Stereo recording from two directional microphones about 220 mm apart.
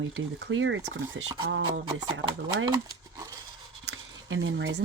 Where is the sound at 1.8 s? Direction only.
20° right (ahead or behind).